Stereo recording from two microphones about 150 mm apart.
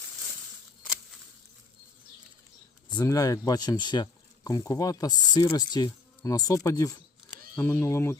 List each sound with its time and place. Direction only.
3.0 s speech: 25° left (ahead or behind)